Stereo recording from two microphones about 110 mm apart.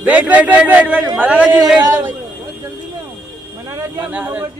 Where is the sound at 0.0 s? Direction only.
10° right (ahead or behind).